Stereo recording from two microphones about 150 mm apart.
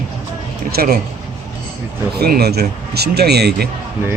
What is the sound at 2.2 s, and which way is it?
Speech, 90° right.